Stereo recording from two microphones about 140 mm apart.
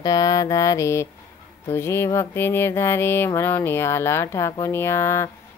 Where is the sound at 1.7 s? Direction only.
20° left (ahead or behind).